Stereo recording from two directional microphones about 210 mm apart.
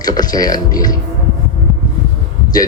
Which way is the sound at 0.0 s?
20° left (ahead or behind).